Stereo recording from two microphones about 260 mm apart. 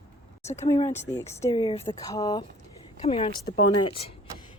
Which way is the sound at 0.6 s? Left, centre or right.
Centre.